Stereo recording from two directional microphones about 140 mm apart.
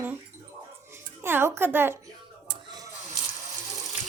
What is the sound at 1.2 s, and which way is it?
Speech, 15° right (ahead or behind).